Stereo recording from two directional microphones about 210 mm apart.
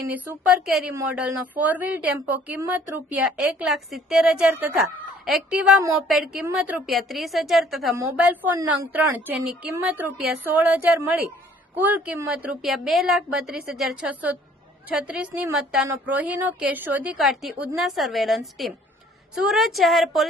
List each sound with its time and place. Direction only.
0.1 s a woman's voice: 5° right (ahead or behind)